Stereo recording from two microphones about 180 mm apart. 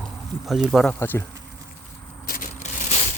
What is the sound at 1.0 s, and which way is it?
Speech, 15° left (ahead or behind).